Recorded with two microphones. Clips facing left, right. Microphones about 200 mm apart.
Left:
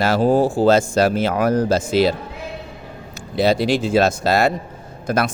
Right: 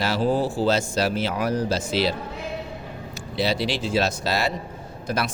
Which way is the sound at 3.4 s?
50° left (ahead or behind).